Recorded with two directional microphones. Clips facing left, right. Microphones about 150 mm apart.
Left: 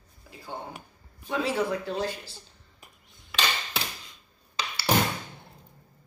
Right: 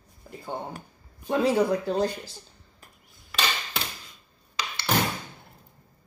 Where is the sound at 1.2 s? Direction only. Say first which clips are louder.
Right 5 dB; 40° right (ahead or behind).